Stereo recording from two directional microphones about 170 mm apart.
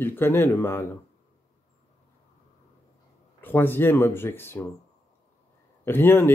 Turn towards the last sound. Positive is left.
turn(degrees=15)  # may be behind; listen again after turning